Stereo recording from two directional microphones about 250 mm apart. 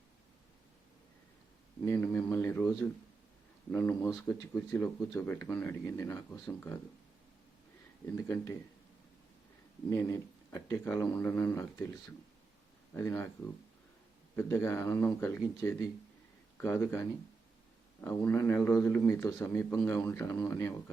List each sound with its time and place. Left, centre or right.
1.8 s a man's voice: centre
8.0 s a man's voice: centre
9.9 s a man's voice: centre
12.9 s a man's voice: centre
14.3 s a man's voice: centre